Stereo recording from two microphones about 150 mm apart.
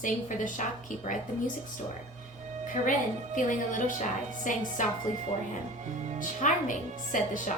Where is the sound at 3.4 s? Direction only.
60° left (ahead or behind).